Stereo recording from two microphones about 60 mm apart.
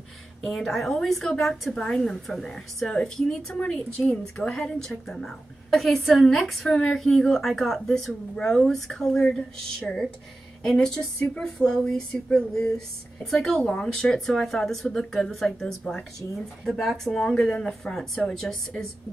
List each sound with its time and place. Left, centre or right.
0.4 s a woman's voice: centre
14.0 s a woman's voice: centre